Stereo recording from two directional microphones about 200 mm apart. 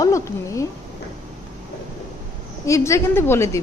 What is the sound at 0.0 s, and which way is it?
Speech, 15° left (ahead or behind).